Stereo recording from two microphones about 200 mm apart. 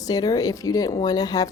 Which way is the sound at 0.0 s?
20° left (ahead or behind).